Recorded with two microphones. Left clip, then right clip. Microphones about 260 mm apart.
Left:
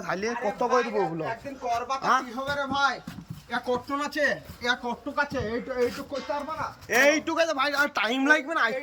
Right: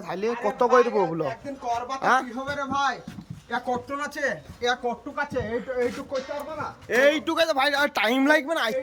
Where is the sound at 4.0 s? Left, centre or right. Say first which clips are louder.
Left 2 dB; centre.